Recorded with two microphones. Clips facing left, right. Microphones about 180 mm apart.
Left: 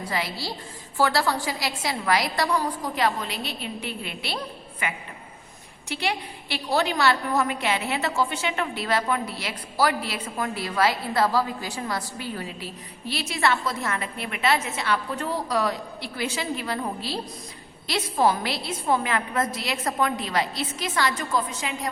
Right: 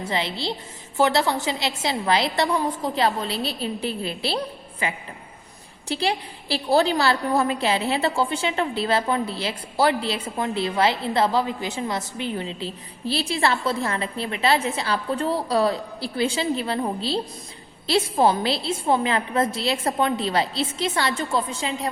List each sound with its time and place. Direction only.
0.0 s a woman's voice: 25° right (ahead or behind)